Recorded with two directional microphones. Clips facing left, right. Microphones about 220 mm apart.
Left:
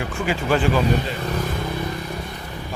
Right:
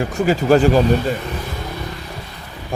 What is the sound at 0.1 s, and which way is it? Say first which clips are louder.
Speech: right 8 dB; 40° right (ahead or behind).